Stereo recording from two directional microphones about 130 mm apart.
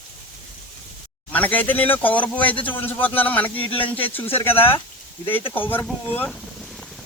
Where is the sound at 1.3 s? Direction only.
10° left (ahead or behind).